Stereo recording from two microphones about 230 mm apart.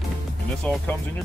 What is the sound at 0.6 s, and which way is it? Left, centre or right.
Speech, centre.